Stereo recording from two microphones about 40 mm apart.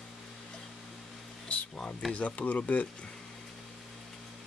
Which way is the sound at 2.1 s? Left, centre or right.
Left.